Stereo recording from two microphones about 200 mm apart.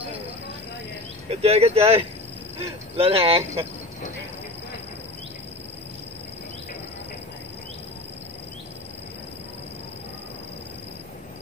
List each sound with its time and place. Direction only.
1.3 s speech: 30° right (ahead or behind)